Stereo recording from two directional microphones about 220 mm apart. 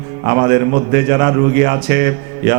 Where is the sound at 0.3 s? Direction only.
15° right (ahead or behind).